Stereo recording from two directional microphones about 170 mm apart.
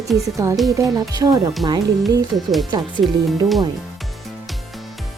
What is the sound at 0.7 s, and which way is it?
Speech, 20° right (ahead or behind).